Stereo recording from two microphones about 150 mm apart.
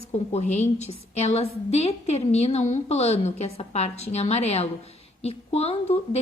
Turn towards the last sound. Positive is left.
turn(degrees=45)  # may be behind; listen again after turning